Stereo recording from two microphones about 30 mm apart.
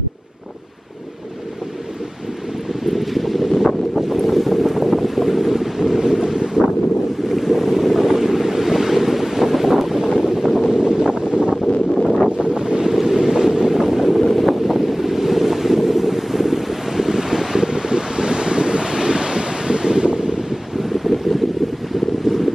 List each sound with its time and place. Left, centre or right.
2.9 s boat: centre
7.3 s waves: centre
10.2 s boat: centre
10.8 s wind noise: right
12.0 s wind noise: centre
12.3 s wind noise: right
13.0 s vehicle: centre
14.3 s waves: centre; by 20.3 s right
20.9 s wind noise: centre
22.2 s wind: centre